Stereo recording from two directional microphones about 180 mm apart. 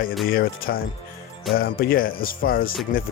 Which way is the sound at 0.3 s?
55° left (ahead or behind).